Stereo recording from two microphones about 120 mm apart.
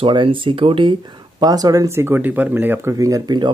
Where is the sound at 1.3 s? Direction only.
30° right (ahead or behind); by 2.9 s 15° right (ahead or behind).